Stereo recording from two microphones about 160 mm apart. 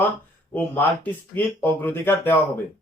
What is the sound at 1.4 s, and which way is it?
Speech, 10° left (ahead or behind).